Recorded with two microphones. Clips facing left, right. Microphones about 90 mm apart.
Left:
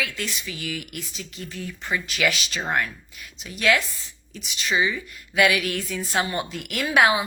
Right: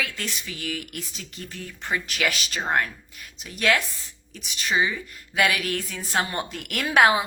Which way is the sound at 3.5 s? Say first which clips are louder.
Left 1 dB; 45° right (ahead or behind).